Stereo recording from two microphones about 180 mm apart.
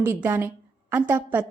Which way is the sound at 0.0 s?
10° right (ahead or behind).